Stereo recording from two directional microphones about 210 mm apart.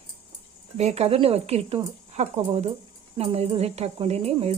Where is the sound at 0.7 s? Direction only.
30° right (ahead or behind).